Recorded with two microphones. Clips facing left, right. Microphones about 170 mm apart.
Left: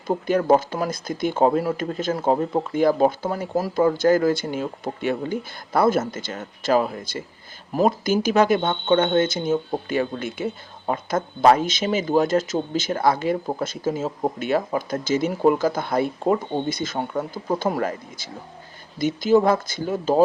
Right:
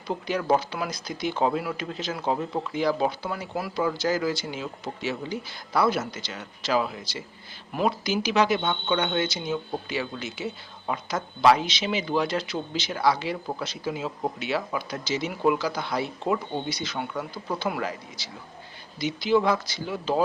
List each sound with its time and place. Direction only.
0.1 s speech: 50° left (ahead or behind)